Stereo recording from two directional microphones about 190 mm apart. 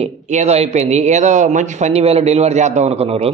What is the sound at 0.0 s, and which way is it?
Speech, 35° right (ahead or behind).